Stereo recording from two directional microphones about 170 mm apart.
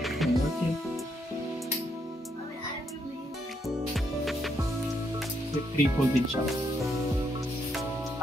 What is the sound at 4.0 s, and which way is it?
Music, centre (ahead or behind).